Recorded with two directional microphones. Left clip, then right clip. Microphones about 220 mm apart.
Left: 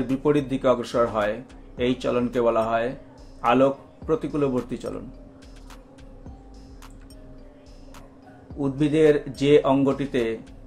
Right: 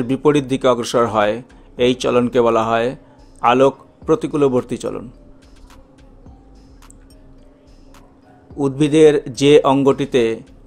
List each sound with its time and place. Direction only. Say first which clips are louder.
0.2 s speech: right 7 dB; 55° right (ahead or behind)
8.5 s speech: right 8 dB; 55° right (ahead or behind)